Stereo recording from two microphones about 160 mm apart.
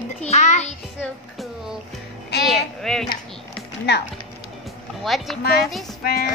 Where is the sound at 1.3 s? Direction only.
Centre (ahead or behind).